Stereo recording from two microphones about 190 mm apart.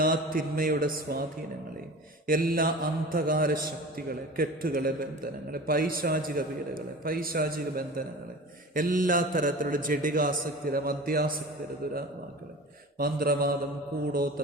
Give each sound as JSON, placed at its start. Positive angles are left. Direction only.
{"t": 0.0, "sound": "speech", "side_deg": -45}
{"t": 2.2, "sound": "speech", "side_deg": -50}
{"t": 13.0, "sound": "speech", "side_deg": -50}